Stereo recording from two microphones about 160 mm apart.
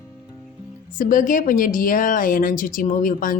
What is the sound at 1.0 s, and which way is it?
A woman's voice, 60° left (ahead or behind).